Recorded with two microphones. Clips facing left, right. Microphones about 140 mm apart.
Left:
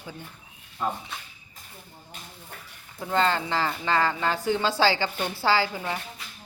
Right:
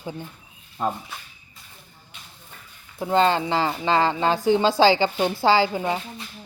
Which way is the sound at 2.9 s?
20° right (ahead or behind).